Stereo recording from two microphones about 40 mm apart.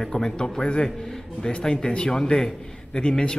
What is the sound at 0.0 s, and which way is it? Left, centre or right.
A man's voice, centre.